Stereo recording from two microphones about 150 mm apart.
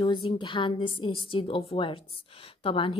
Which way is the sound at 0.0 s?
30° left (ahead or behind).